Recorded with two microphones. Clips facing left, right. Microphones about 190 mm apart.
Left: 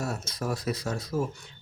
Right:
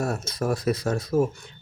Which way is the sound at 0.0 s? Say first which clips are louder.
Right 5 dB; 50° right (ahead or behind).